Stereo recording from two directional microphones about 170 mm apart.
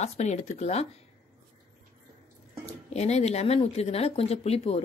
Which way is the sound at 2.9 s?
40° left (ahead or behind).